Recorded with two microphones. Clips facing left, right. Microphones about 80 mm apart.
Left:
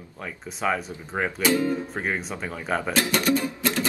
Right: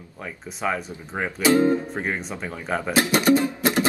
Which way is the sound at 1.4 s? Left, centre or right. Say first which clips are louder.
Right 6 dB; right.